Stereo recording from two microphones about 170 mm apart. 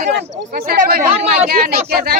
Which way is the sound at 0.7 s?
65° right (ahead or behind).